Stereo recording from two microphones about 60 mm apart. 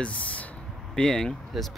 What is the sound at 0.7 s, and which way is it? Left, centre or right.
Speech, centre.